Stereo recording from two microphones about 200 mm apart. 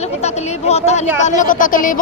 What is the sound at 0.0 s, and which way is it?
A woman's voice, 35° left (ahead or behind).